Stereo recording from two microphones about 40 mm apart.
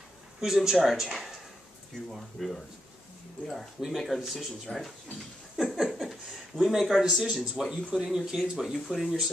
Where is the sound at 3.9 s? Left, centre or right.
Centre.